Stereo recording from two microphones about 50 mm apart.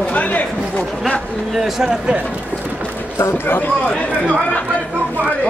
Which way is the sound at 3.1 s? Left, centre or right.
Left.